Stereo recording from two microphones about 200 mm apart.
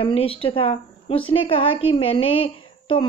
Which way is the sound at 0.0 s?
30° left (ahead or behind).